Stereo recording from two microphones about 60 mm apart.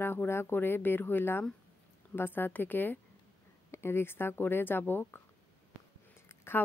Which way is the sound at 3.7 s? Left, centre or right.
Left.